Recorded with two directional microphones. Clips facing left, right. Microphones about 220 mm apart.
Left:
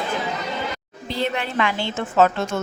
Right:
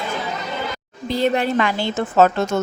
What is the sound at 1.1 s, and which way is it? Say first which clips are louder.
A woman's voice: right 6 dB; 40° right (ahead or behind).